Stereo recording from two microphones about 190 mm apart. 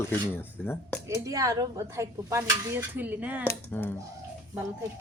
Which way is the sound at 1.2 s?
15° right (ahead or behind).